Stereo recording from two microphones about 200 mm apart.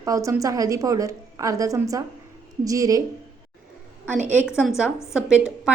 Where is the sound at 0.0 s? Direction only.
15° right (ahead or behind).